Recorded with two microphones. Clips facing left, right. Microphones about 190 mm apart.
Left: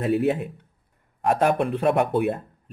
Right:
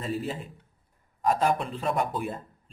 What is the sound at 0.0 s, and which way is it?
Speech, 65° left (ahead or behind).